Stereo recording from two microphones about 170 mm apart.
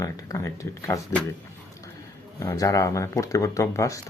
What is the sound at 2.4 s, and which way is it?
Speech, 20° left (ahead or behind).